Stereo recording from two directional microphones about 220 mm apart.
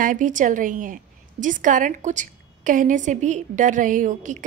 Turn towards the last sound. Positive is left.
turn(degrees=-35)  # may be behind; listen again after turning